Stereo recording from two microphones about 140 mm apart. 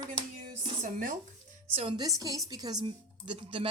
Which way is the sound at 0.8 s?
70° right (ahead or behind).